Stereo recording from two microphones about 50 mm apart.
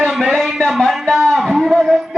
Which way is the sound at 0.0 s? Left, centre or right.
Centre.